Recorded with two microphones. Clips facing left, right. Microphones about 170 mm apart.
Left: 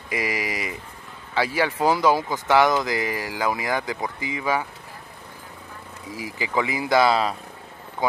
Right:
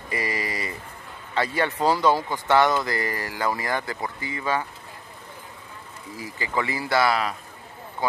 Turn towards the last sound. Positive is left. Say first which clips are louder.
# left 3 dB
turn(degrees=20)  # may be behind; listen again after turning